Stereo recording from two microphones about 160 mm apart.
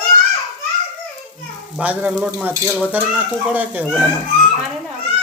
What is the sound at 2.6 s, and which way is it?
Frying, 5° right (ahead or behind).